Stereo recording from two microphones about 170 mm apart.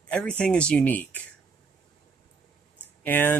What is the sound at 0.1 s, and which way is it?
Speech, 5° left (ahead or behind).